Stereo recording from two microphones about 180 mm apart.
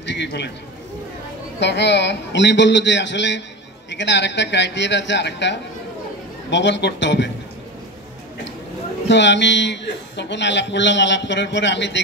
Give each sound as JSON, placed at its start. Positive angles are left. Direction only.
{"t": 0.0, "sound": "a man's voice", "side_deg": 75}
{"t": 1.6, "sound": "a man's voice", "side_deg": 75}
{"t": 9.1, "sound": "a man's voice", "side_deg": 75}